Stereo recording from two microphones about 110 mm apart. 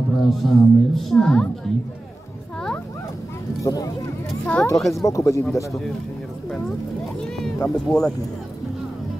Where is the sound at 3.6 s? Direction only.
35° left (ahead or behind).